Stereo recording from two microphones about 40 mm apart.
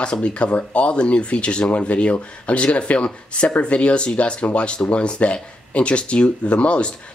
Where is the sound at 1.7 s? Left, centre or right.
Left.